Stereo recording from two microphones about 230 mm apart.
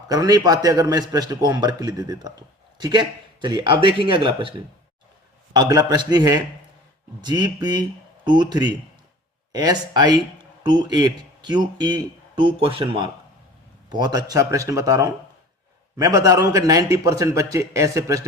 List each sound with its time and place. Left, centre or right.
0.1 s a man's voice: centre
5.5 s a man's voice: centre